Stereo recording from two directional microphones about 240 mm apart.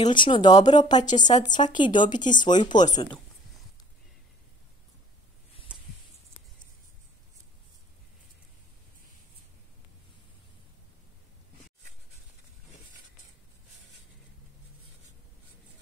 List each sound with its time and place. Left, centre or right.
0.0 s speech: centre